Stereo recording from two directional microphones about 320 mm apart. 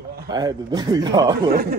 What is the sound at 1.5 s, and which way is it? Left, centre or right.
Speech, right.